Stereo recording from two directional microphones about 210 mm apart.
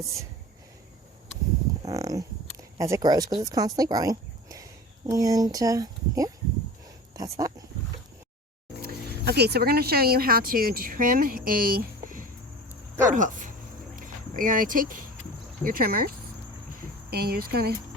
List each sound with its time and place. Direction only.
1.9 s speech: 15° right (ahead or behind)
8.8 s speech: 50° right (ahead or behind)
13.9 s a sound: 40° right (ahead or behind)
15.6 s speech: 45° right (ahead or behind)
17.1 s speech: 50° right (ahead or behind)